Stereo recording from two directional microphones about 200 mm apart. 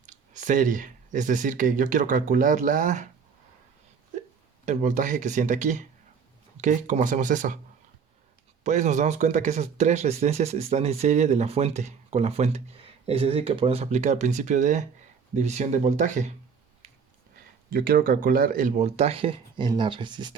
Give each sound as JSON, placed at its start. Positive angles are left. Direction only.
{"t": 0.0, "sound": "speech", "side_deg": -40}
{"t": 4.6, "sound": "speech", "side_deg": -40}
{"t": 8.6, "sound": "speech", "side_deg": -35}
{"t": 17.7, "sound": "speech", "side_deg": -45}